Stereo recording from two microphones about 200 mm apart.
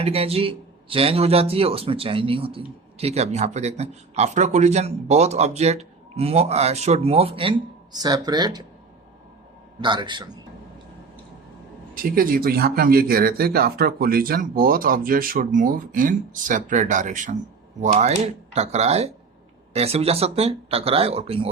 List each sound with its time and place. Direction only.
0.0 s a man's voice: 30° right (ahead or behind)
9.8 s speech: 25° right (ahead or behind)
12.0 s a man's voice: 45° right (ahead or behind); by 21.5 s 30° right (ahead or behind)